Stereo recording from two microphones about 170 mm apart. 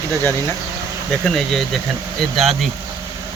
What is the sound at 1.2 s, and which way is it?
Speech, centre (ahead or behind).